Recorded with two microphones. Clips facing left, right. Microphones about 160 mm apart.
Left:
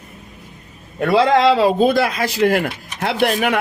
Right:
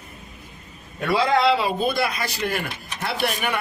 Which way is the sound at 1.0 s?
65° left (ahead or behind).